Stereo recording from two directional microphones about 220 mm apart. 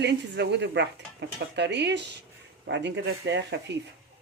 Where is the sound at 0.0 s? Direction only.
50° right (ahead or behind).